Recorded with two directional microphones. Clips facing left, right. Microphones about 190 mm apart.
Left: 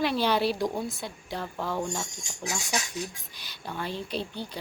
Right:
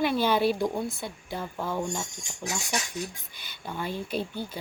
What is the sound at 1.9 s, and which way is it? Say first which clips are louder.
Speech: even; 5° left (ahead or behind).